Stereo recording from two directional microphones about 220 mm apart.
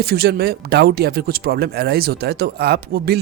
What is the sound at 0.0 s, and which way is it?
Speech, 45° right (ahead or behind).